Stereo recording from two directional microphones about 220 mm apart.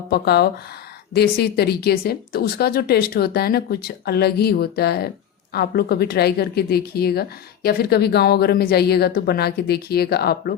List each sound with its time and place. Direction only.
0.1 s a woman's voice: 50° left (ahead or behind)